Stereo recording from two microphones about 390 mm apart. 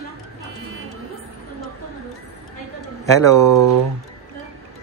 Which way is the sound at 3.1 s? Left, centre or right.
Centre.